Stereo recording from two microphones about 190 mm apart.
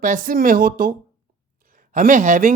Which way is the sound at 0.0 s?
45° right (ahead or behind).